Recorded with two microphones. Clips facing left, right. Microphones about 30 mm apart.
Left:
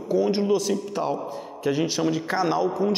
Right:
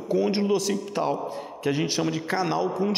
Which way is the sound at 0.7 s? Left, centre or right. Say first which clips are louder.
Even; centre.